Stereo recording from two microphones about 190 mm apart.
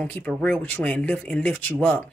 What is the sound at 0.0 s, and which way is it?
Speech, 5° left (ahead or behind).